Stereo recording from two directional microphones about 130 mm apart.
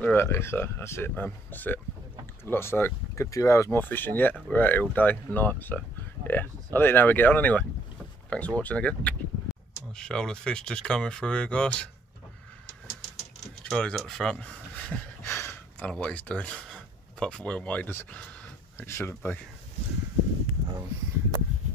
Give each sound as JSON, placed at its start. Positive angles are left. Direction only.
{"t": 0.0, "sound": "speech", "side_deg": 15}
{"t": 13.7, "sound": "speech", "side_deg": 5}